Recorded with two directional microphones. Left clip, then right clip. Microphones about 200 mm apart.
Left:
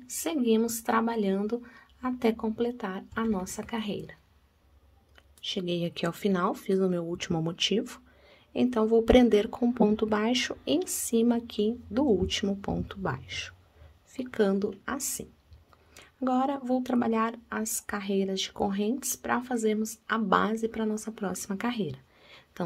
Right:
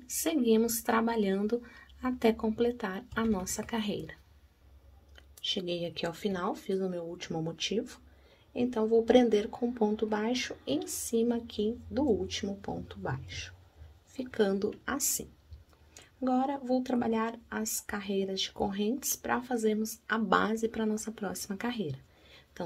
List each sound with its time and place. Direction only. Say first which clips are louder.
0.0 s speech: even; 10° left (ahead or behind)
5.4 s speech: left 1 dB; 10° left (ahead or behind)
15.9 s speech: left 2 dB; 20° left (ahead or behind)